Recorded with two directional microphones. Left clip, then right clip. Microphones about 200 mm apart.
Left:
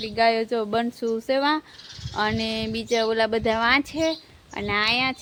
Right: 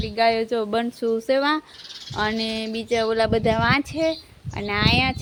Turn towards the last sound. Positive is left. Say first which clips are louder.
# right 1 dB
turn(degrees=0)  # may be behind; listen again after turning